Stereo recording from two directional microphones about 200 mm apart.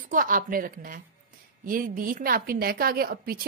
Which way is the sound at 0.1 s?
40° right (ahead or behind).